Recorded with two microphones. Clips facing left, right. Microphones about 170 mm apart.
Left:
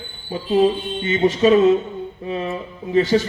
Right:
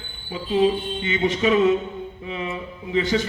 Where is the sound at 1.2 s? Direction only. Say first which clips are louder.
Left 6 dB; 35° left (ahead or behind).